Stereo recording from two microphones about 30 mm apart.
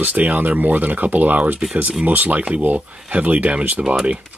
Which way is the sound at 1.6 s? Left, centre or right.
Right.